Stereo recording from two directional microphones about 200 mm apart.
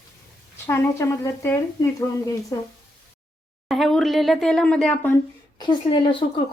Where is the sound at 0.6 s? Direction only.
10° left (ahead or behind).